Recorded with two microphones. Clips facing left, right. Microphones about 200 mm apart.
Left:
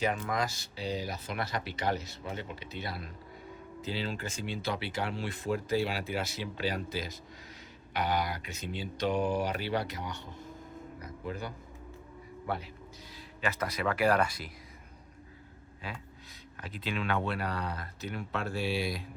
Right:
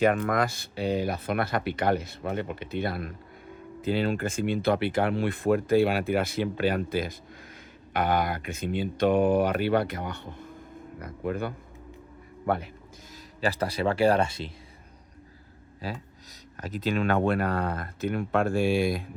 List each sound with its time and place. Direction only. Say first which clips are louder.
0.0 s speech: right 8 dB; 60° right (ahead or behind)
11.0 s music: right 9 dB; 55° right (ahead or behind)
12.5 s speech: right 8 dB; 55° right (ahead or behind)
13.4 s speech: right 6 dB; 30° right (ahead or behind)
15.8 s speech: right 7 dB; 35° right (ahead or behind)